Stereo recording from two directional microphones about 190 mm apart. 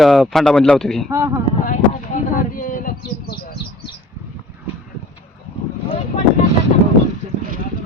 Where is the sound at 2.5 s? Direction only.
45° left (ahead or behind).